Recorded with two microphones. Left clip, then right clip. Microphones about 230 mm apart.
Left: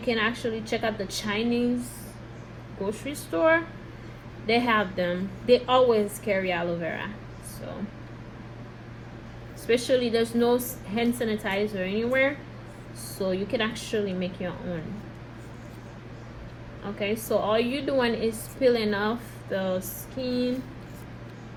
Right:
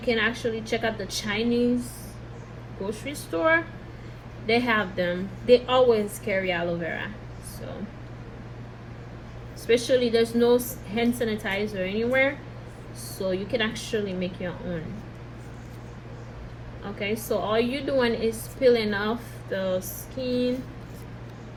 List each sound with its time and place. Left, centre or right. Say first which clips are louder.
0.0 s a woman's voice: right 2 dB; centre
2.8 s a woman's voice: left 1 dB; left
9.6 s a woman's voice: right 2 dB; left
16.8 s a woman's voice: even; left